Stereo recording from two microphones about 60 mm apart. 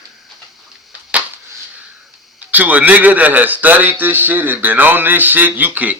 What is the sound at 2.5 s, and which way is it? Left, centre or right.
A man's voice, right.